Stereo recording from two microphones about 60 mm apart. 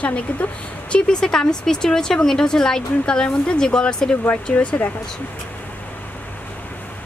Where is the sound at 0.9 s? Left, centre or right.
Centre.